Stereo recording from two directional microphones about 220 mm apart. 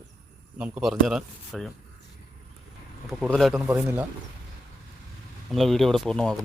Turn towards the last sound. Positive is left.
turn(degrees=5)  # may be behind; listen again after turning